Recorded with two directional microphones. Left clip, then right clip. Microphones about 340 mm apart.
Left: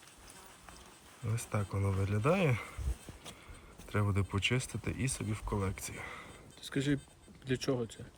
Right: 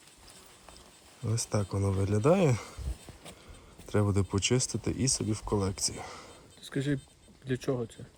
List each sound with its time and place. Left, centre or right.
1.3 s speech: centre
3.8 s speech: centre
6.7 s speech: right